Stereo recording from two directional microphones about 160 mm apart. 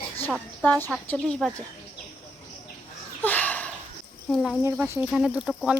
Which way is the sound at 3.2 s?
10° left (ahead or behind).